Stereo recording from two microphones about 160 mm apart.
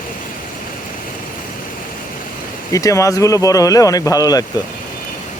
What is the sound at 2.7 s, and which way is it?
Speech, 20° left (ahead or behind).